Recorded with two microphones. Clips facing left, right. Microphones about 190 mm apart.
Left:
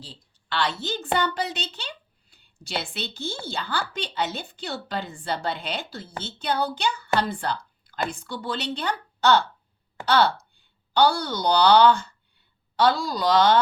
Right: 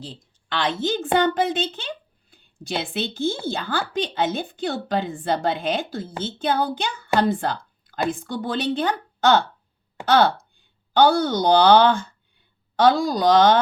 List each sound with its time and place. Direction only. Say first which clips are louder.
0.2 s a woman's voice: right 1 dB; 50° right (ahead or behind)